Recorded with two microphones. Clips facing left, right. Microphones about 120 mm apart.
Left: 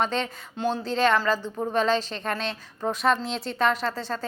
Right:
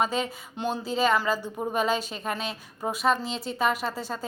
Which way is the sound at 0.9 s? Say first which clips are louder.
Left 1 dB; 5° right (ahead or behind).